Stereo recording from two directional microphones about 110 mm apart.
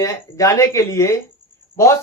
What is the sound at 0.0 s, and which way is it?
A man's voice, 30° left (ahead or behind).